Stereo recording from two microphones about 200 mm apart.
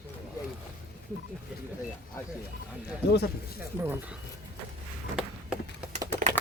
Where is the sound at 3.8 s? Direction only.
10° right (ahead or behind).